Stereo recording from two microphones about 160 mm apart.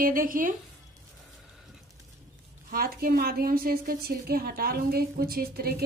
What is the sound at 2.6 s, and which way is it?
A woman's voice, 65° right (ahead or behind).